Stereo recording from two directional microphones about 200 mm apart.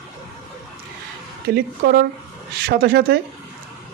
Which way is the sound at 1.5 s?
50° right (ahead or behind).